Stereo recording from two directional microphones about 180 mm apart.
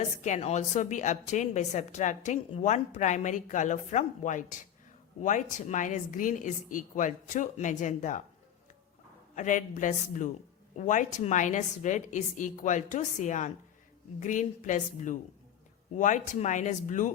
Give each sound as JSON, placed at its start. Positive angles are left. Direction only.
{"t": 0.3, "sound": "a woman's voice", "side_deg": 40}
{"t": 9.3, "sound": "a woman's voice", "side_deg": 45}